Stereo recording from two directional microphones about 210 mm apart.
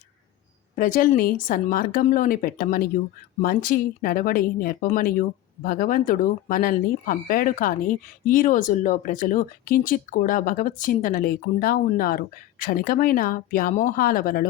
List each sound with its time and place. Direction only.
0.8 s speech: 40° left (ahead or behind)